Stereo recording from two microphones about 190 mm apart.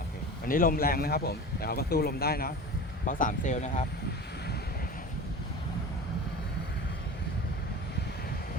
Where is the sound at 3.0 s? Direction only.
45° left (ahead or behind).